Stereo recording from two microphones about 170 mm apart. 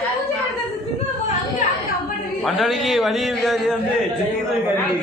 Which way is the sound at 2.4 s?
Centre (ahead or behind).